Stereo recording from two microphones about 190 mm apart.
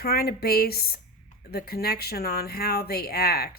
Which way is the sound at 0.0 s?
55° left (ahead or behind).